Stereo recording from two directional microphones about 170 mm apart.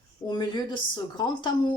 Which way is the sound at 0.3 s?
25° left (ahead or behind).